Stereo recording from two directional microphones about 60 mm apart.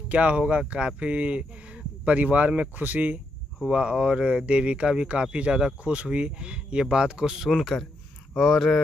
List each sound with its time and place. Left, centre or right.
0.1 s speech: right
3.6 s speech: centre